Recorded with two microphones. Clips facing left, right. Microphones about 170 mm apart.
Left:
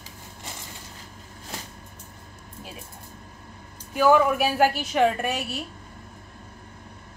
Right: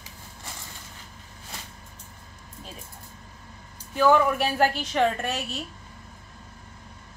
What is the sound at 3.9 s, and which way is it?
Speech, 10° left (ahead or behind).